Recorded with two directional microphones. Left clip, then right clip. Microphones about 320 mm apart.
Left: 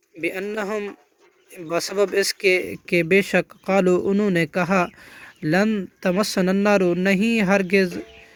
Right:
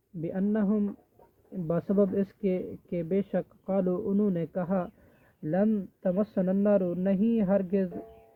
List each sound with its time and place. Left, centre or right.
0.2 s speech: left
3.8 s speech: left
4.4 s speech: left